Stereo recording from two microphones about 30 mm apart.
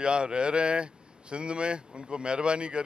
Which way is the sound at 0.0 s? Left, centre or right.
Right.